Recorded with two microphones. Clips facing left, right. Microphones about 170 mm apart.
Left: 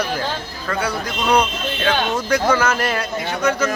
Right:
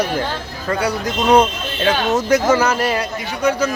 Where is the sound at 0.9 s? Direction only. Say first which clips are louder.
Right 5 dB; 45° right (ahead or behind).